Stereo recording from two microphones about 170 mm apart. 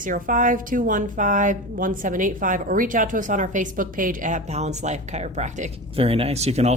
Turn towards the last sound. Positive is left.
turn(degrees=-40)  # may be behind; listen again after turning